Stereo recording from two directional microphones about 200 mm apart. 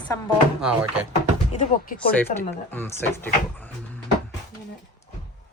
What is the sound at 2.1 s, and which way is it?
Speech, 10° left (ahead or behind).